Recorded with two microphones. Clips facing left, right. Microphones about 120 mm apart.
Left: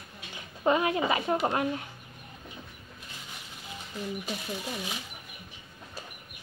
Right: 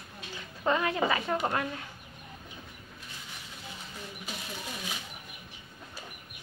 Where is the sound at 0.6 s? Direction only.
15° left (ahead or behind).